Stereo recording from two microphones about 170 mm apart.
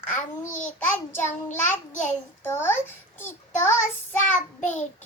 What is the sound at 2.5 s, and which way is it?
Speech, 15° left (ahead or behind).